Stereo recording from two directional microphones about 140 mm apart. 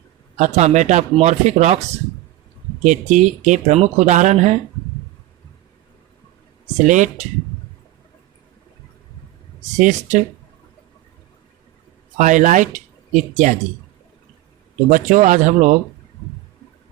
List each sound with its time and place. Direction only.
0.3 s speech: 55° right (ahead or behind)
2.8 s speech: 60° right (ahead or behind)
6.7 s speech: 65° right (ahead or behind)
9.7 s speech: 60° right (ahead or behind)
12.1 s speech: 65° right (ahead or behind)
14.8 s speech: 70° right (ahead or behind)